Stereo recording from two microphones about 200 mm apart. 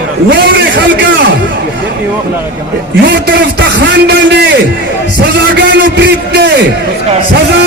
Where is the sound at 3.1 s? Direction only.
55° right (ahead or behind).